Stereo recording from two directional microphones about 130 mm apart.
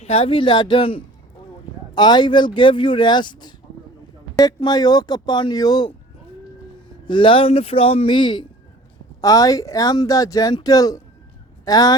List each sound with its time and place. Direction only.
0.0 s speech: 50° left (ahead or behind); by 5.9 s 30° left (ahead or behind)
7.1 s speech: 40° left (ahead or behind)
9.2 s speech: 25° left (ahead or behind)